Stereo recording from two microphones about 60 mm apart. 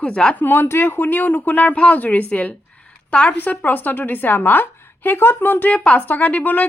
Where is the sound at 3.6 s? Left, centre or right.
Left.